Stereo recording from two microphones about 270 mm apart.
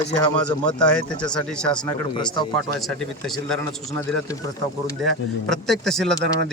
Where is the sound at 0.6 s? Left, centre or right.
Centre.